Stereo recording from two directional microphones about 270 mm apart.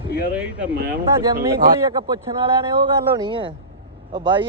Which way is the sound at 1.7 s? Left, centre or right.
Centre.